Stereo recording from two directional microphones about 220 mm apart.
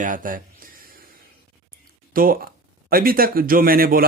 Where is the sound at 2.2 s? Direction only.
40° right (ahead or behind).